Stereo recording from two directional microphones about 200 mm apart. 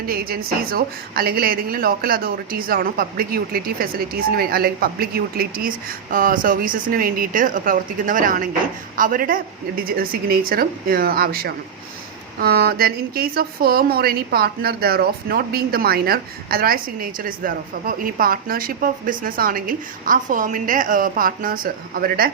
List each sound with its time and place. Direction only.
0.1 s speech: 50° right (ahead or behind)